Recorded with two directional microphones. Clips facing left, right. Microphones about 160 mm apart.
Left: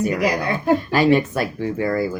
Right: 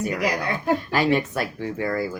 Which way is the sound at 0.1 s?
25° left (ahead or behind).